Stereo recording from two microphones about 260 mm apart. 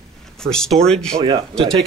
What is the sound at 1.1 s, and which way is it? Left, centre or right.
Speech, centre.